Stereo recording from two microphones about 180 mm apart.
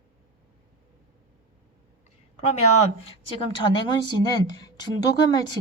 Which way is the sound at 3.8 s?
25° left (ahead or behind).